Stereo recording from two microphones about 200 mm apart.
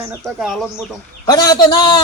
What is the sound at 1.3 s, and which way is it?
Speech, 20° left (ahead or behind).